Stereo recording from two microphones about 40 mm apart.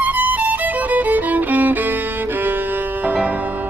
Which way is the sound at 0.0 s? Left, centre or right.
Right.